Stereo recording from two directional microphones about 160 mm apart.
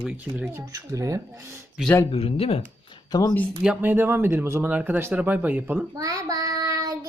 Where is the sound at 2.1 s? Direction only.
35° left (ahead or behind).